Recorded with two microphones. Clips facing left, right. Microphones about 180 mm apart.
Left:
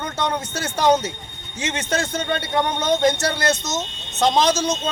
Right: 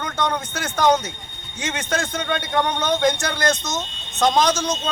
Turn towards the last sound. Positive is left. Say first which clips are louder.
# even
turn(degrees=25)  # may be behind; listen again after turning